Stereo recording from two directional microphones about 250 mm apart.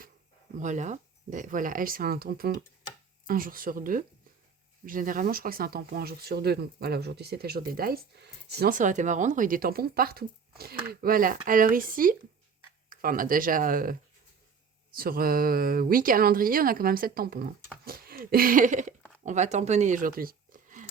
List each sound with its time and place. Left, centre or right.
0.5 s speech: right
14.9 s speech: right